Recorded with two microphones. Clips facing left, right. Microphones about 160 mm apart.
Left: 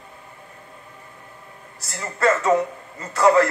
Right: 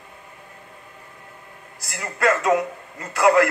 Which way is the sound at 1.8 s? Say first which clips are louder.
Even; 30° left (ahead or behind).